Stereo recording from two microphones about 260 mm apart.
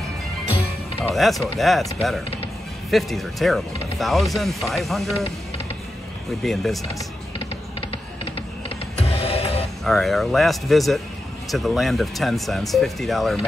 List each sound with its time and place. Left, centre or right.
1.0 s speech: centre
2.9 s speech: centre
6.4 s speech: centre
6.9 s music: centre
8.9 s music: left
9.8 s speech: centre